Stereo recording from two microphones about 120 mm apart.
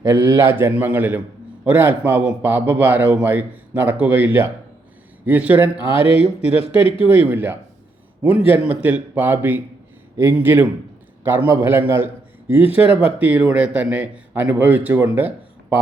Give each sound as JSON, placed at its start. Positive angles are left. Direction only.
{"t": 0.1, "sound": "a man's voice", "side_deg": -20}
{"t": 5.9, "sound": "speech", "side_deg": 50}
{"t": 7.1, "sound": "a man's voice", "side_deg": -15}
{"t": 12.8, "sound": "speech", "side_deg": 55}
{"t": 13.1, "sound": "a man's voice", "side_deg": -15}